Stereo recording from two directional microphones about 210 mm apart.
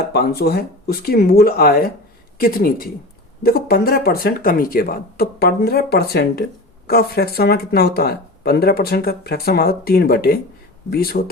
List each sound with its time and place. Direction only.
0.1 s speech: 50° left (ahead or behind)